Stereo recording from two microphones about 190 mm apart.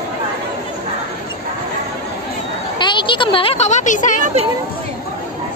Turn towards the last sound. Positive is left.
turn(degrees=40)  # may be behind; listen again after turning